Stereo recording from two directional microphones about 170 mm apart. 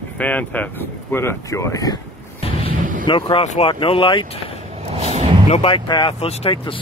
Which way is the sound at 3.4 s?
40° left (ahead or behind).